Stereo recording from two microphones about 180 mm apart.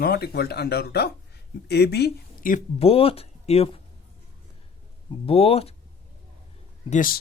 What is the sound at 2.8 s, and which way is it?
Speech, 30° left (ahead or behind).